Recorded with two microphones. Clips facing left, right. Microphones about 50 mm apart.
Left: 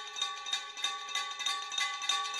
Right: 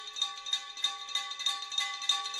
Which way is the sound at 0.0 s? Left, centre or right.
Left.